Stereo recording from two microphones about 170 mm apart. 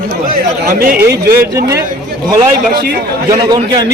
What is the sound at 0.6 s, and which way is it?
Speech, 65° right (ahead or behind).